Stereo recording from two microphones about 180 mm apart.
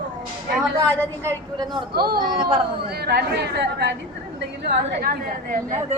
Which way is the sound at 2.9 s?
60° right (ahead or behind).